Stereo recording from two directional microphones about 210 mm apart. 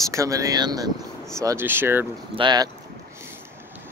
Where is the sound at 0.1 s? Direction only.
15° right (ahead or behind).